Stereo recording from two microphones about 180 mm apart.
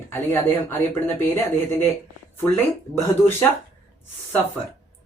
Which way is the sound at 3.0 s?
15° left (ahead or behind).